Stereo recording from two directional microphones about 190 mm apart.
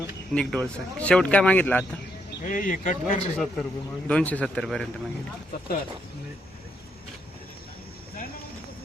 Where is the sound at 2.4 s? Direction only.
45° left (ahead or behind).